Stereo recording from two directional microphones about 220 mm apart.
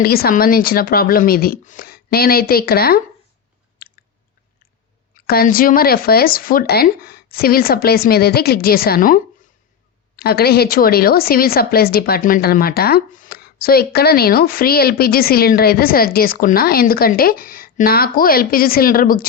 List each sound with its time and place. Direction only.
0.0 s a woman's voice: 45° left (ahead or behind)
3.8 s chewing: 45° left (ahead or behind)
5.2 s a woman's voice: 45° left (ahead or behind)